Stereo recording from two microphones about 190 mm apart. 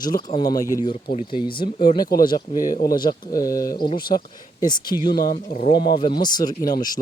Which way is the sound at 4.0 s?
50° left (ahead or behind).